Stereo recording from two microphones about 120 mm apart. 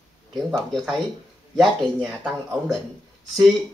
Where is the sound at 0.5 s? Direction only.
Centre (ahead or behind).